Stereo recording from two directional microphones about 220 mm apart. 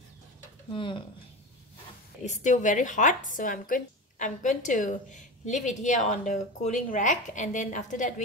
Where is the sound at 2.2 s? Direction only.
30° left (ahead or behind).